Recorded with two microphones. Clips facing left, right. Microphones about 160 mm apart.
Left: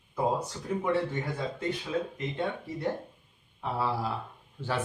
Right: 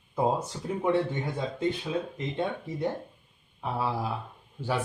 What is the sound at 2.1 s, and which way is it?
Speech, 20° right (ahead or behind).